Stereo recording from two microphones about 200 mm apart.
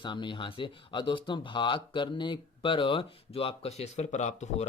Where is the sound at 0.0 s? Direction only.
25° left (ahead or behind).